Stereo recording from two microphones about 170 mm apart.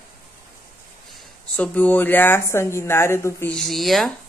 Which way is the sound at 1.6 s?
10° left (ahead or behind).